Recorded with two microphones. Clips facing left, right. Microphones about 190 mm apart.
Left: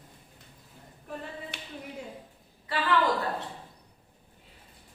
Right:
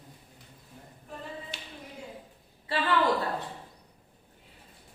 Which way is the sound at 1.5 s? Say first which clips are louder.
Left 1 dB; 60° left (ahead or behind).